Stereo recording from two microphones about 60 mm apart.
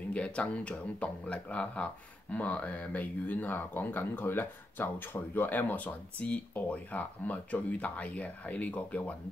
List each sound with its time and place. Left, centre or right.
0.1 s speech: centre